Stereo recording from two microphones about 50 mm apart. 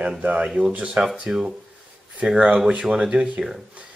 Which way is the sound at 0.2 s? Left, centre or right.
Right.